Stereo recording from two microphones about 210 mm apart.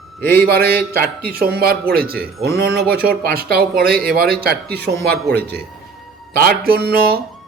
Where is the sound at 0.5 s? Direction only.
45° right (ahead or behind).